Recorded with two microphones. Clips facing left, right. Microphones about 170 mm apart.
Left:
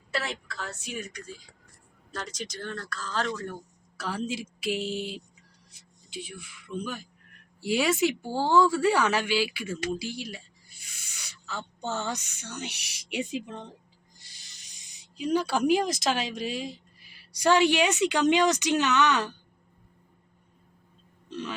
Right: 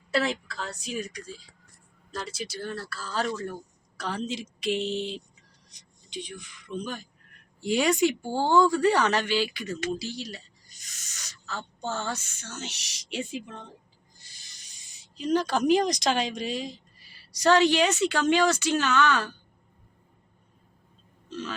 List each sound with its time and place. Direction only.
0.1 s a woman's voice: 35° right (ahead or behind)
2.1 s speech: 10° right (ahead or behind)
3.9 s a man's voice: 5° left (ahead or behind)
15.0 s speech: 10° left (ahead or behind)
21.2 s burping: 15° left (ahead or behind)